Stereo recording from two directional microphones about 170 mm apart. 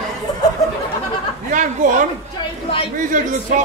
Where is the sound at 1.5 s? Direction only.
50° right (ahead or behind).